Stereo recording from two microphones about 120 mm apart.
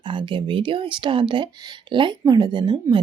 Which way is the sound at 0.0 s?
40° right (ahead or behind).